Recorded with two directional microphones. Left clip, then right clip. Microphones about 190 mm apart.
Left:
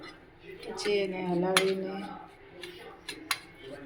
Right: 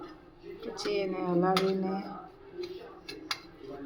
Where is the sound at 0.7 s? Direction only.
50° right (ahead or behind).